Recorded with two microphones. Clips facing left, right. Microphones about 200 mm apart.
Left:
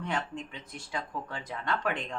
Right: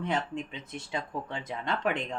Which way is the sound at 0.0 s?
20° right (ahead or behind).